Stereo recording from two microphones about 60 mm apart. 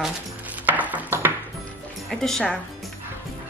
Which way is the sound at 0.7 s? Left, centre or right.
Right.